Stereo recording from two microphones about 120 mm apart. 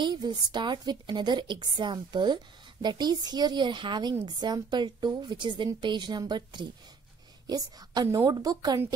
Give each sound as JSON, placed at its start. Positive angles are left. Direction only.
{"t": 0.0, "sound": "a woman's voice", "side_deg": -40}